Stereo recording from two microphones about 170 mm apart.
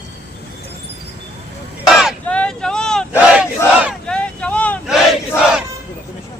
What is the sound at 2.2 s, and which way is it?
Vehicle, 5° left (ahead or behind).